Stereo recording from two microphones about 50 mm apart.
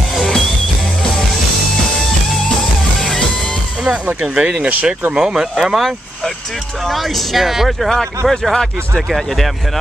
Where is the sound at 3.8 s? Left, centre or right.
Centre.